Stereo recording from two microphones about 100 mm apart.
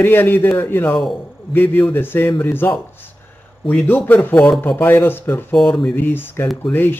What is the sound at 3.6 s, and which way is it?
A man's voice, 10° left (ahead or behind).